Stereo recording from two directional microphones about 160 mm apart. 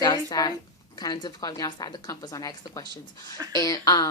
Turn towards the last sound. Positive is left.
turn(degrees=25)  # may be behind; listen again after turning